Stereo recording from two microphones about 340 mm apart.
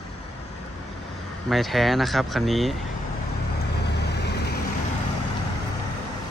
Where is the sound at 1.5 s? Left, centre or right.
Centre.